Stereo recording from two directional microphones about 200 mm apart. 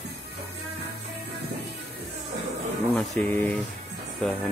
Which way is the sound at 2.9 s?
5° left (ahead or behind).